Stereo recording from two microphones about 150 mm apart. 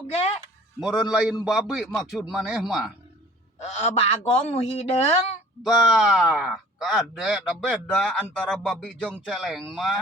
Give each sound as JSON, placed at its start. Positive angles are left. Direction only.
{"t": 0.8, "sound": "speech", "side_deg": -5}
{"t": 3.6, "sound": "a woman's voice", "side_deg": 50}
{"t": 5.6, "sound": "speech", "side_deg": -5}